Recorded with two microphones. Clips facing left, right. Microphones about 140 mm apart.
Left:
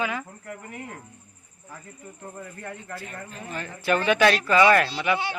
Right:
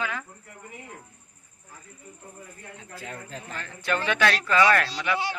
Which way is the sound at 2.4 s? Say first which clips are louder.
Left 9 dB; 75° left (ahead or behind).